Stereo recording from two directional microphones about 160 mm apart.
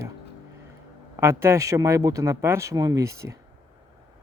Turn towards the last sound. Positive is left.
turn(degrees=-20)  # may be behind; listen again after turning